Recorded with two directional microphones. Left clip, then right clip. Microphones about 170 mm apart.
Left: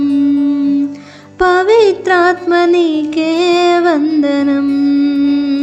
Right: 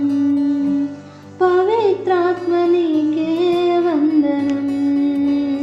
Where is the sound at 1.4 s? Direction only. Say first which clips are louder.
Left 6 dB; 20° left (ahead or behind).